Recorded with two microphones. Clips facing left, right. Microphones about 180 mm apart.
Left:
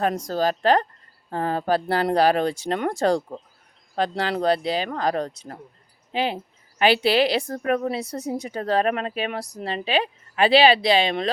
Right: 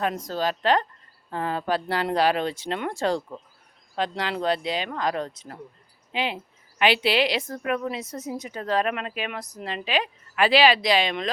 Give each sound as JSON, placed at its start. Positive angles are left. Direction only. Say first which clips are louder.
{"t": 0.0, "sound": "a woman's voice", "louder": "left 4 dB", "side_deg": 40}